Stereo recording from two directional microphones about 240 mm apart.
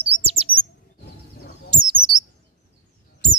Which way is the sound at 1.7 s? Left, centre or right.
Centre.